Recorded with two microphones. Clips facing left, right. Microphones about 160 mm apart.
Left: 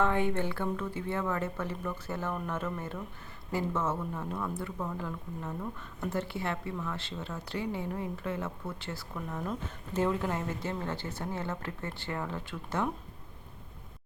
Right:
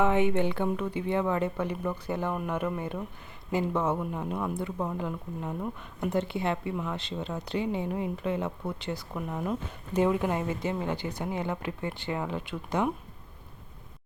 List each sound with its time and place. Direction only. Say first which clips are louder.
0.0 s speech: right 4 dB; 15° right (ahead or behind)